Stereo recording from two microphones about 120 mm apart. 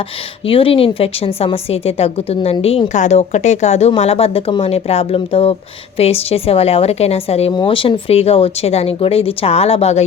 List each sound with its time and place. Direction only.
0.4 s speech: 50° left (ahead or behind)
2.9 s a woman's voice: 75° left (ahead or behind); by 7.5 s 60° left (ahead or behind)
7.5 s speech: 45° left (ahead or behind)